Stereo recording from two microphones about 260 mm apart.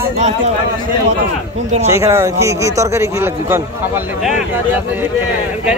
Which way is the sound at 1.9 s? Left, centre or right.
Centre.